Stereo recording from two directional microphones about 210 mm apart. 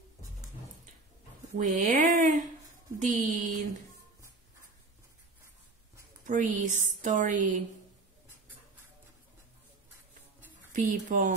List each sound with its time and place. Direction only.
1.6 s a woman's voice: 35° right (ahead or behind)
6.2 s a woman's voice: 35° right (ahead or behind)
10.7 s a woman's voice: 40° right (ahead or behind)